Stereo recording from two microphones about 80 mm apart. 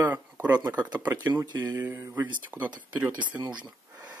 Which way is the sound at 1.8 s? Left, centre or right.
Right.